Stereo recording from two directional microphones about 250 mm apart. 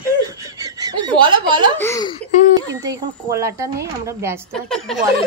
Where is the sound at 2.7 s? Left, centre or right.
Centre.